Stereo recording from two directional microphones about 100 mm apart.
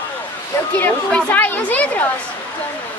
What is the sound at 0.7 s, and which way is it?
A woman's voice, 15° left (ahead or behind).